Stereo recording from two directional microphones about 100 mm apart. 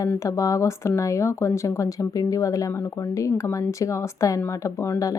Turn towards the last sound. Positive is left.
turn(degrees=30)  # may be behind; listen again after turning